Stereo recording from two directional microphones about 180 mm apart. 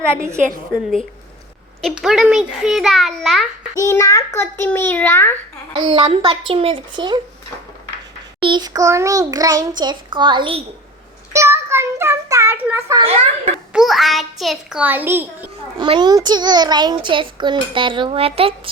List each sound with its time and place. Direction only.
0.2 s a woman's voice: 15° right (ahead or behind)
1.8 s a child's voice: centre (ahead or behind)
3.8 s a child's voice: 15° left (ahead or behind)
5.7 s a child's voice: 25° right (ahead or behind)
8.4 s a child's voice: 25° right (ahead or behind)
11.3 s child singing: 15° right (ahead or behind)
13.1 s a child's voice: 40° right (ahead or behind)
13.7 s a child's voice: centre (ahead or behind)
15.8 s a child's voice: 25° right (ahead or behind)